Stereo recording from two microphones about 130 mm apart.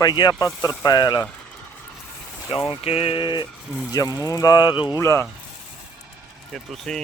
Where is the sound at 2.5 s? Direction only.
45° left (ahead or behind).